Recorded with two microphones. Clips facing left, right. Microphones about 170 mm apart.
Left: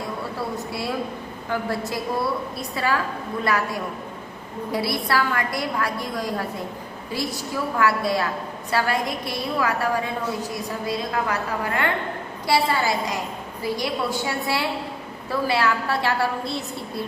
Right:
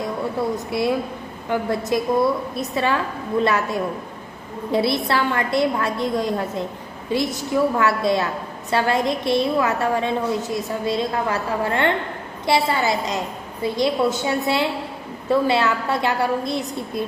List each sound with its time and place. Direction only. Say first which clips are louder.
0.5 s a woman's voice: right 6 dB; 20° right (ahead or behind)